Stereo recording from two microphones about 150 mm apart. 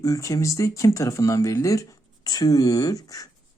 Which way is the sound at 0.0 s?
20° left (ahead or behind).